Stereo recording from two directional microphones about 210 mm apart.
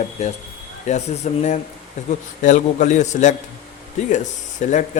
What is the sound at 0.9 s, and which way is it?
A man's voice, 35° left (ahead or behind).